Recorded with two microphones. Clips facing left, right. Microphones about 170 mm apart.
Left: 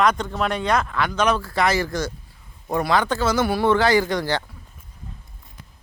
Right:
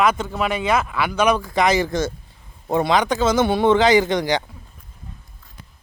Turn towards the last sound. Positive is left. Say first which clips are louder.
# right 3 dB
turn(degrees=-20)  # may be behind; listen again after turning